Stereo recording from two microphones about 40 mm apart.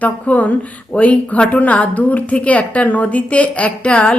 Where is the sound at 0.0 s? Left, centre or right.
Left.